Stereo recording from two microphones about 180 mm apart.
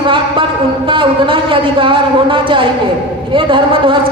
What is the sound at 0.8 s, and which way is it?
A woman's voice, 30° right (ahead or behind).